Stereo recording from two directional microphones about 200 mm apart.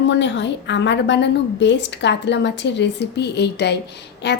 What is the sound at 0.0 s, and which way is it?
A woman's voice, 65° left (ahead or behind).